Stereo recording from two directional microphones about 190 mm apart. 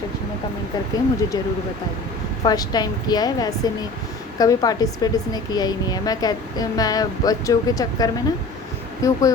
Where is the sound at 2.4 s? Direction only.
20° left (ahead or behind).